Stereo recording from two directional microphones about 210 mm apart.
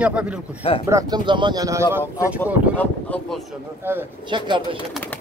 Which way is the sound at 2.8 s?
5° left (ahead or behind).